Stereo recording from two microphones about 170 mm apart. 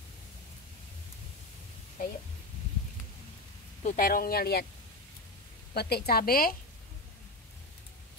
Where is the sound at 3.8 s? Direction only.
55° left (ahead or behind).